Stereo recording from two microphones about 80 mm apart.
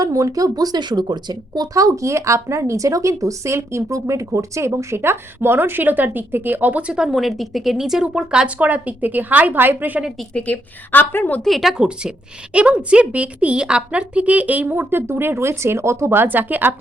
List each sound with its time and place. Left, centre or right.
0.0 s speech: right
10.3 s a woman's voice: centre
11.4 s a woman's voice: centre; by 16.7 s right